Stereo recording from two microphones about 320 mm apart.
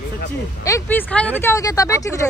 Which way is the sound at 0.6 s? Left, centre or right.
Centre.